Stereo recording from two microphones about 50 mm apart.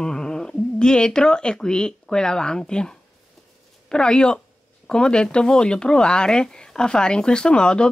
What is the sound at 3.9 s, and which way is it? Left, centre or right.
Speech, centre.